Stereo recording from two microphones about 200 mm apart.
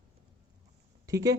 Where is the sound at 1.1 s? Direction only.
15° right (ahead or behind).